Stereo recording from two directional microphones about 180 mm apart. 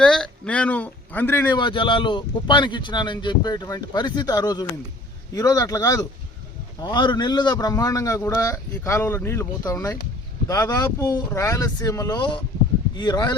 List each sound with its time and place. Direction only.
0.0 s speech: 5° left (ahead or behind)
1.5 s speech: 25° left (ahead or behind)